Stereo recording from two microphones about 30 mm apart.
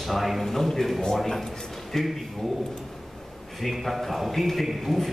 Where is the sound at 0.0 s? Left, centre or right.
Centre.